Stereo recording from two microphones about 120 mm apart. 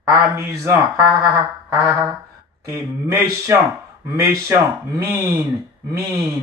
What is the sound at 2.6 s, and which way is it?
Speech, 25° right (ahead or behind).